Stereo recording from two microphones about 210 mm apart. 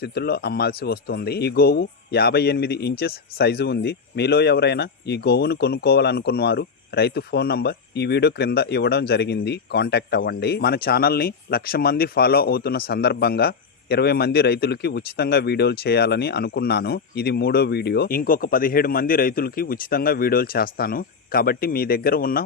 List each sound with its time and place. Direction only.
0.0 s speech: 50° left (ahead or behind)